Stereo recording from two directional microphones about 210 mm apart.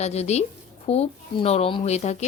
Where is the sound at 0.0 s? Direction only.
30° left (ahead or behind).